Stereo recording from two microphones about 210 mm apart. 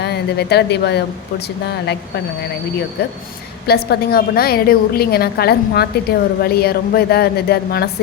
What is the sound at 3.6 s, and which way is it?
A woman's voice, 50° left (ahead or behind).